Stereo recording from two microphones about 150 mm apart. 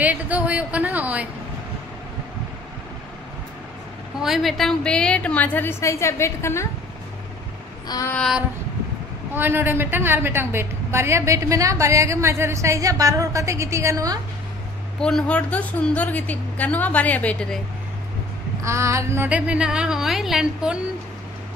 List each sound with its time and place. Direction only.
0.0 s a woman's voice: 10° right (ahead or behind)
4.2 s a woman's voice: centre (ahead or behind); by 6.7 s 20° left (ahead or behind)
8.1 s child singing: 5° left (ahead or behind)
9.3 s a woman's voice: 15° right (ahead or behind)
15.0 s a woman's voice: 5° left (ahead or behind)
18.6 s a woman's voice: 20° right (ahead or behind)